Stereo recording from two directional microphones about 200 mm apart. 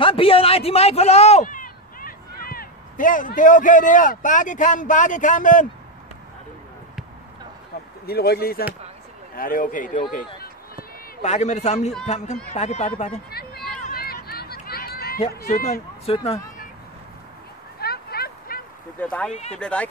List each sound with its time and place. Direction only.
0.0 s speech: 25° left (ahead or behind)
8.1 s speech: 50° left (ahead or behind)
11.2 s a man's voice: 35° left (ahead or behind)
13.3 s a sound: 50° left (ahead or behind)
16.1 s speech: 30° left (ahead or behind)
17.7 s a sound: 50° left (ahead or behind)
18.9 s speech: 5° left (ahead or behind)